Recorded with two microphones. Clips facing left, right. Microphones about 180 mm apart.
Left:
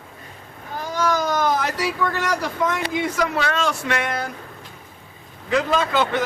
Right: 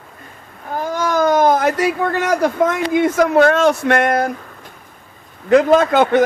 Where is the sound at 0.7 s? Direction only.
50° right (ahead or behind).